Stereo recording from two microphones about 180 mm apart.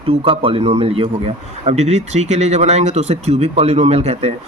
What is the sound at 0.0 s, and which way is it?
A man's voice, 30° right (ahead or behind).